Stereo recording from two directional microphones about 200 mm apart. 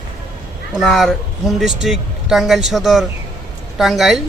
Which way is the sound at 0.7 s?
Centre (ahead or behind).